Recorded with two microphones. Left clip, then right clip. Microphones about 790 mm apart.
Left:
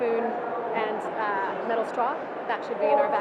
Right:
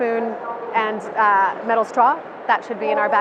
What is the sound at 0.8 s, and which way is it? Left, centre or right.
A woman's voice, right.